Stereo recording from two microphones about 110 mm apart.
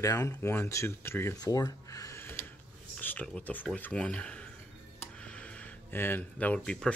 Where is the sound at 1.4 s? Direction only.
35° left (ahead or behind).